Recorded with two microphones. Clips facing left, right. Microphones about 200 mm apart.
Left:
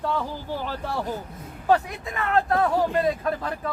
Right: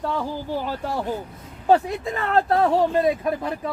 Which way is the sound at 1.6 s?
30° right (ahead or behind).